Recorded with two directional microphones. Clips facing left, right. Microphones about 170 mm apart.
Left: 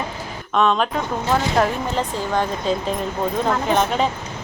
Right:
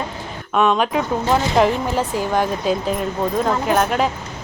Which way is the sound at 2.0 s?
10° right (ahead or behind).